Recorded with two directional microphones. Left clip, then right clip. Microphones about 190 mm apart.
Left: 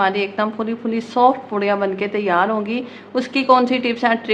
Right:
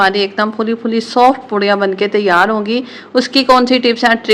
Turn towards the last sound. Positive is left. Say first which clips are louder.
# right 7 dB
turn(degrees=-25)  # may be behind; listen again after turning